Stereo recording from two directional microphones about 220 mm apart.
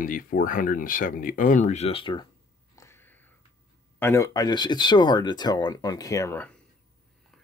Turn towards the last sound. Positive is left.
turn(degrees=10)  # may be behind; listen again after turning